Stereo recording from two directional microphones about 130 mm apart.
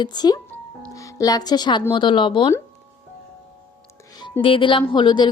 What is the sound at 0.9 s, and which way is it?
Speech, 25° left (ahead or behind).